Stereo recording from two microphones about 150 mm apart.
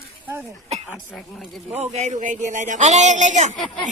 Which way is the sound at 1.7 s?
50° right (ahead or behind).